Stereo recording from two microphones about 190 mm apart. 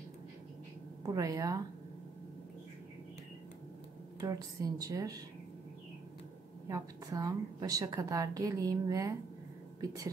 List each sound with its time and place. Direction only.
1.0 s a woman's voice: 20° right (ahead or behind)
4.2 s speech: 20° right (ahead or behind)
6.7 s a woman's voice: 20° right (ahead or behind)